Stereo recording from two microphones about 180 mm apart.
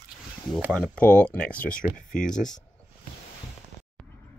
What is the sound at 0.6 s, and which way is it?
Speech, 5° left (ahead or behind).